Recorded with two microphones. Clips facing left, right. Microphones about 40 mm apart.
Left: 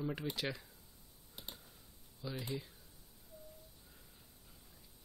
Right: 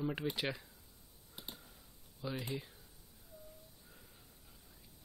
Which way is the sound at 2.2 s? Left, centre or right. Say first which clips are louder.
Right 1 dB; right.